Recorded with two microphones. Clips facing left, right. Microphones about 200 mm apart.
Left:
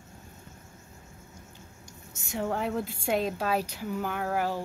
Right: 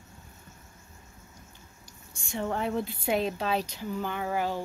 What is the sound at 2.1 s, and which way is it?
A woman's voice, 5° left (ahead or behind).